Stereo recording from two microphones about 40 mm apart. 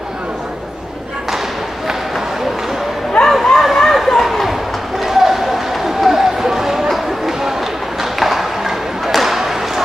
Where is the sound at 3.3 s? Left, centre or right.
Centre.